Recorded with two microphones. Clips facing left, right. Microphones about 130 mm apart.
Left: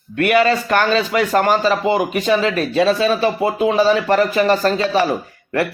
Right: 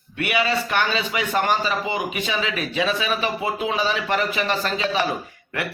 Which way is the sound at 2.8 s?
35° left (ahead or behind).